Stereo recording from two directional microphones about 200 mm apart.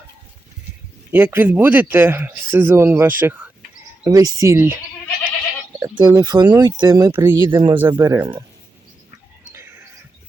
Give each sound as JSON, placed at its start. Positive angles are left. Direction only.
{"t": 1.1, "sound": "speech", "side_deg": -10}
{"t": 5.8, "sound": "speech", "side_deg": -20}